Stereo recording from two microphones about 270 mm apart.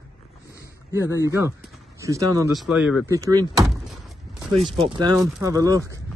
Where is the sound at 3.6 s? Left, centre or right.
Centre.